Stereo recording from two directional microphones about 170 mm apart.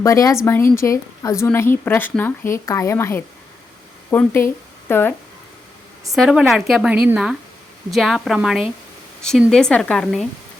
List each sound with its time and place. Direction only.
0.0 s a woman's voice: 20° left (ahead or behind)
6.1 s a woman's voice: centre (ahead or behind)